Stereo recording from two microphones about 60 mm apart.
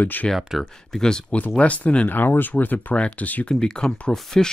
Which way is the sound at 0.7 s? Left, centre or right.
Centre.